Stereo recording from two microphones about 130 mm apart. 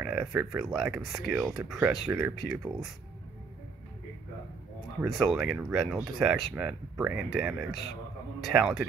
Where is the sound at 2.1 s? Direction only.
15° right (ahead or behind).